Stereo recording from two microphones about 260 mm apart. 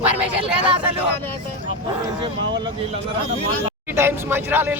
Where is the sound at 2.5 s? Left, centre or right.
Centre.